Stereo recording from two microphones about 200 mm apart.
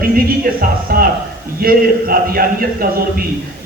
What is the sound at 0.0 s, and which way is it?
Music, 45° right (ahead or behind).